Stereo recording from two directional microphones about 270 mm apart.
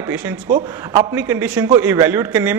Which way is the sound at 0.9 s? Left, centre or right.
Centre.